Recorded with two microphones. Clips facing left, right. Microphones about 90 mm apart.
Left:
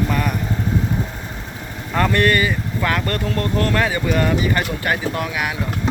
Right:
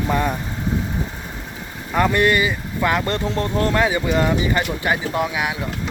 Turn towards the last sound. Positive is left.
turn(degrees=-20)  # may be behind; listen again after turning